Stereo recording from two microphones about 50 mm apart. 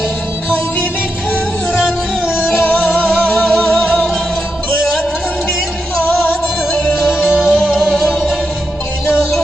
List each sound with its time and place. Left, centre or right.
1.7 s music: centre
2.6 s music: left
7.3 s music: centre
7.7 s music: centre
8.0 s music: centre